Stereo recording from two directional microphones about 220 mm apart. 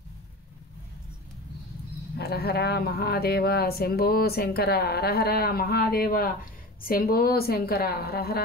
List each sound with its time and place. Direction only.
2.1 s speech: 45° left (ahead or behind)